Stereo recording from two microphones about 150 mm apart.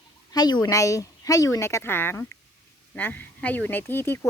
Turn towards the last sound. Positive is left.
turn(degrees=15)  # may be behind; listen again after turning